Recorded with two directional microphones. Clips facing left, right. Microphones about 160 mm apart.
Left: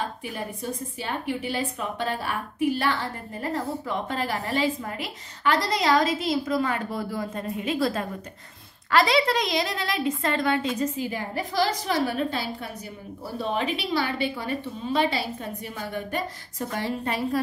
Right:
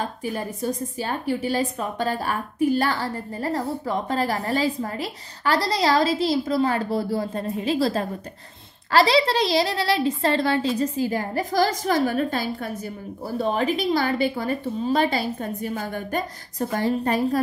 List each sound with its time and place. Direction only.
0.2 s a woman's voice: 40° right (ahead or behind)